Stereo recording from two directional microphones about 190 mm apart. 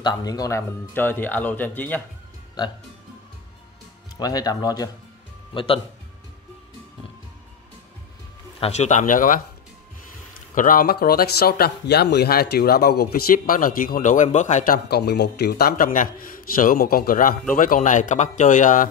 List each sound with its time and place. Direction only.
0.0 s speech: 20° left (ahead or behind)
4.2 s speech: 20° left (ahead or behind)
8.5 s speech: 35° left (ahead or behind)
10.5 s speech: 45° left (ahead or behind)